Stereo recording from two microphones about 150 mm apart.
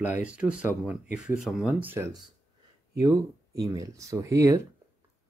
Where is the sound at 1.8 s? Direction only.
15° right (ahead or behind).